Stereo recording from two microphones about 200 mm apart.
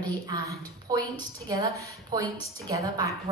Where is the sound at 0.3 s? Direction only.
20° right (ahead or behind).